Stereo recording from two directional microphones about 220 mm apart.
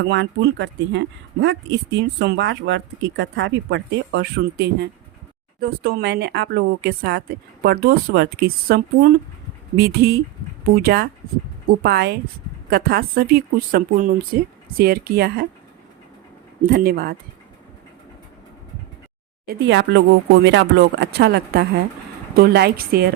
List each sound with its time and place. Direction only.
0.0 s speech: 55° right (ahead or behind)
16.7 s speech: 45° right (ahead or behind)
19.5 s speech: 55° right (ahead or behind)